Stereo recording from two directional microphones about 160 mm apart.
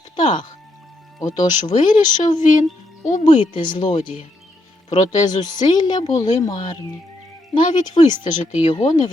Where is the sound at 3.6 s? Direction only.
30° left (ahead or behind).